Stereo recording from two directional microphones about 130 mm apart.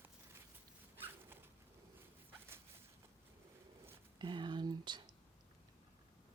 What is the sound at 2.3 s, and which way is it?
Dog, 15° right (ahead or behind).